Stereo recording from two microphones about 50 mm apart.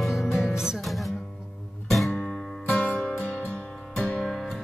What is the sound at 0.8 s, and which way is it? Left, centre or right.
Music, centre.